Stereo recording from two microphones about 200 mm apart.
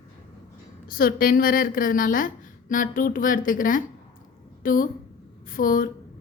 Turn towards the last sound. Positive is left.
turn(degrees=45)  # may be behind; listen again after turning